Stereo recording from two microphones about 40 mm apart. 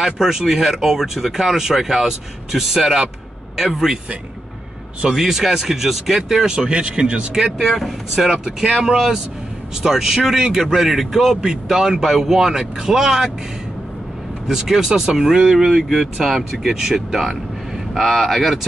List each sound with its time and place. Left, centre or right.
0.0 s a man's voice: centre
5.1 s a man's voice: centre
6.5 s speech: right
7.5 s a man's voice: centre
14.5 s a man's voice: centre